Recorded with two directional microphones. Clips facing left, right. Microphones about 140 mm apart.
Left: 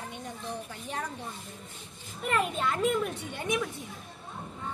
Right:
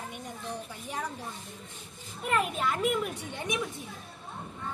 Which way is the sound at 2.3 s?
5° right (ahead or behind).